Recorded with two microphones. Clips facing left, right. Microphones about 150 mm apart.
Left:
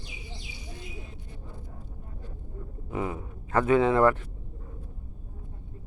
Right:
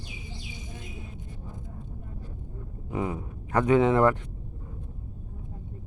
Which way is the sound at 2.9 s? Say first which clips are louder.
Right 1 dB; 20° right (ahead or behind).